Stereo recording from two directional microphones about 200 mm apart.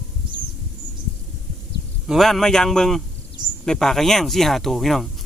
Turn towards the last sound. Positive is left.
turn(degrees=0)  # may be behind; listen again after turning